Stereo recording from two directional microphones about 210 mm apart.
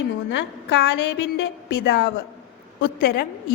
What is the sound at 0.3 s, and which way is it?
A woman's voice, 55° left (ahead or behind).